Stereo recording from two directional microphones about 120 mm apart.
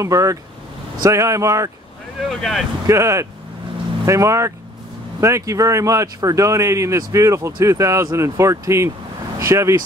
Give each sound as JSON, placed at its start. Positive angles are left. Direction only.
{"t": 0.0, "sound": "speech", "side_deg": -25}
{"t": 2.2, "sound": "speech", "side_deg": 0}
{"t": 2.9, "sound": "speech", "side_deg": -25}